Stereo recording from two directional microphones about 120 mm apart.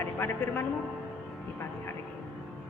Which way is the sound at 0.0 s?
20° left (ahead or behind).